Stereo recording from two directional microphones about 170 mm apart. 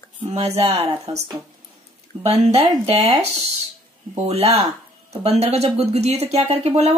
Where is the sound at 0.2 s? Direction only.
40° right (ahead or behind).